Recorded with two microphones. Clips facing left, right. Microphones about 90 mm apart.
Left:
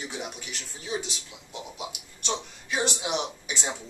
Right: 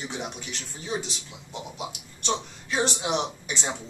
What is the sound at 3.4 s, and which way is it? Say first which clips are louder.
Speech: right 1 dB; 10° left (ahead or behind).